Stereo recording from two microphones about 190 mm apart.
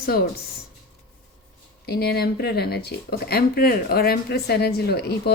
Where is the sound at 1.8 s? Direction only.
55° left (ahead or behind).